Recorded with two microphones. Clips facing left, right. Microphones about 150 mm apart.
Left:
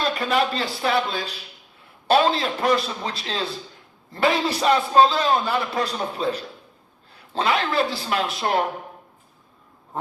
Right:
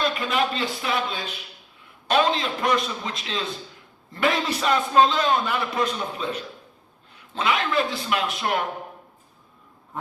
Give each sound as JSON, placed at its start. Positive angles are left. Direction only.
{"t": 0.0, "sound": "a man's voice", "side_deg": 35}